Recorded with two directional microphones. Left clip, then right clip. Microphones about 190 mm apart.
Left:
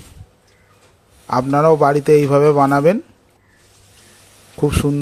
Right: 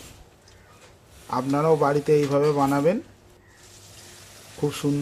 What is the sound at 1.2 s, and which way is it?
A man's voice, 35° left (ahead or behind).